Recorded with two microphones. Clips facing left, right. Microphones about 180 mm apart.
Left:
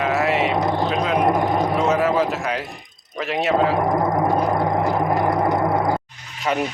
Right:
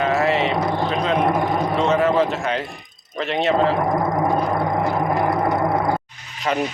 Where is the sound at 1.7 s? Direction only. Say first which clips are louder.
Right 3 dB; centre (ahead or behind).